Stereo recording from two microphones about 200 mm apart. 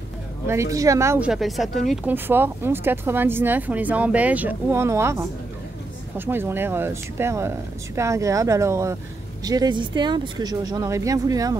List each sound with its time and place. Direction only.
0.5 s speech: 15° right (ahead or behind)